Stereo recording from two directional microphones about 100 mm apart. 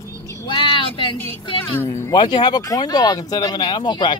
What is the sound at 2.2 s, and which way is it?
Speech, 50° left (ahead or behind).